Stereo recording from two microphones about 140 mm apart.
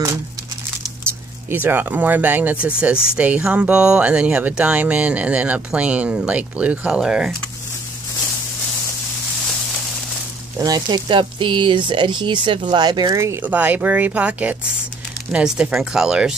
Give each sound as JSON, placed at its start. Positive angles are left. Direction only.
{"t": 1.5, "sound": "speech", "side_deg": -15}
{"t": 10.6, "sound": "speech", "side_deg": -30}